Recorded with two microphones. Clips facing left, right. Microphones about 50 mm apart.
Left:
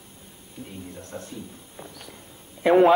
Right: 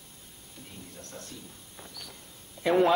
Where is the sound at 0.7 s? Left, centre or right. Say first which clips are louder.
Left 6 dB; centre.